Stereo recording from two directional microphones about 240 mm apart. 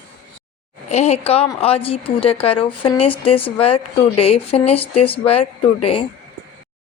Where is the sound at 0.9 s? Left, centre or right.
Left.